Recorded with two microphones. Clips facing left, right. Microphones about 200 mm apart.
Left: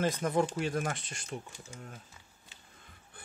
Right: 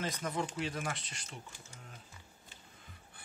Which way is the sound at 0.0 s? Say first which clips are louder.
Left 8 dB; 50° left (ahead or behind).